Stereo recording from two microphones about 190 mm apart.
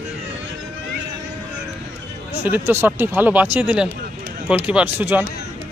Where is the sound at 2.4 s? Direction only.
10° right (ahead or behind).